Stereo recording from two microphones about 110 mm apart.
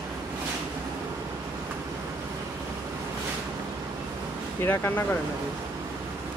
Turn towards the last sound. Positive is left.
turn(degrees=20)  # may be behind; listen again after turning